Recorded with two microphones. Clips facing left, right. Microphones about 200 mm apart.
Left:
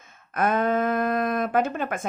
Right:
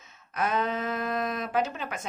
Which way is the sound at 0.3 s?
50° left (ahead or behind).